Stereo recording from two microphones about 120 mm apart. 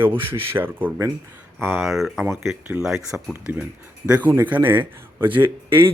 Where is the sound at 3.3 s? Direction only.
15° right (ahead or behind).